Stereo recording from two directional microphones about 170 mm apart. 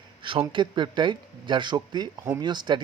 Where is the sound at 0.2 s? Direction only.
30° right (ahead or behind).